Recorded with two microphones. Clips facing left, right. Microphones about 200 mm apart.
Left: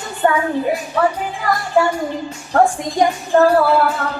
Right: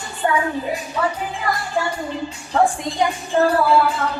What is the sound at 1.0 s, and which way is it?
Speech, 60° left (ahead or behind).